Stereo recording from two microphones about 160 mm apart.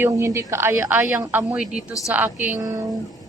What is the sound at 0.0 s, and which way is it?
A woman's voice, 15° right (ahead or behind).